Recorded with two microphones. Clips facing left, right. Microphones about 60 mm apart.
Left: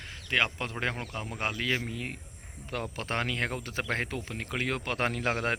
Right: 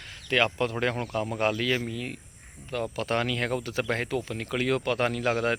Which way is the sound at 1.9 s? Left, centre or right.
Left.